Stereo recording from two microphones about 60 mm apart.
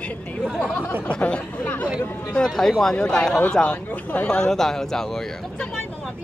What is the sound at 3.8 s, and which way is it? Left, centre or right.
Speech, left.